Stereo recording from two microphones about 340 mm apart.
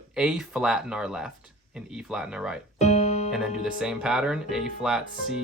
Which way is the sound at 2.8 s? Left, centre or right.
Centre.